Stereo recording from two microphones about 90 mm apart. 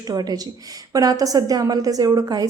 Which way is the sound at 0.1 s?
45° right (ahead or behind).